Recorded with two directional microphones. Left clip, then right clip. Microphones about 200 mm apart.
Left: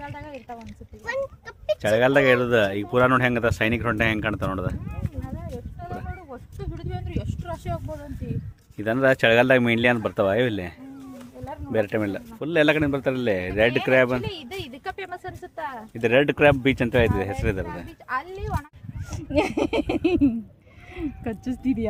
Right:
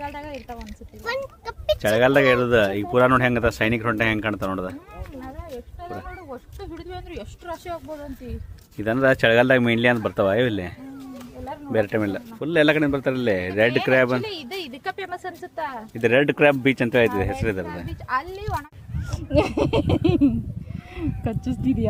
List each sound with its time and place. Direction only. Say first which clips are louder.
0.0 s speech: right 5 dB; 5° left (ahead or behind)
1.0 s a child's voice: right 1 dB; 50° right (ahead or behind)
1.8 s speech: right 1 dB; 10° left (ahead or behind)
5.8 s speech: right 1 dB; 10° left (ahead or behind)
11.7 s speech: right 2 dB; 15° left (ahead or behind)
14.2 s speech: right 3 dB; 5° right (ahead or behind)
16.0 s speech: right 1 dB; 15° left (ahead or behind)
17.8 s speech: right 6 dB; centre (ahead or behind)